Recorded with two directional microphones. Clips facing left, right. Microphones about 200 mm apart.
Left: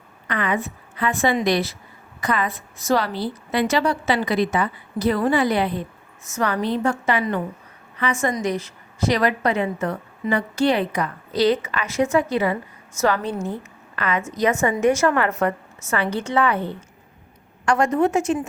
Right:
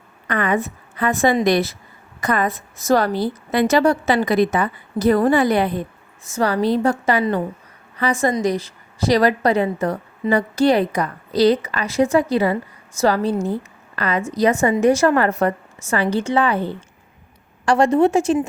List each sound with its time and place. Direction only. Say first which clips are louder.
0.3 s a woman's voice: right 4 dB; 45° right (ahead or behind)
6.2 s a woman's voice: right 4 dB; 35° right (ahead or behind)